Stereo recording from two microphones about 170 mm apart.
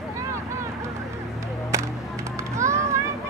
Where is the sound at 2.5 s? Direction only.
15° right (ahead or behind).